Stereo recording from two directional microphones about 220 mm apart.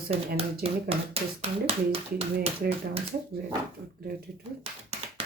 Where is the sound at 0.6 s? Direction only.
25° right (ahead or behind).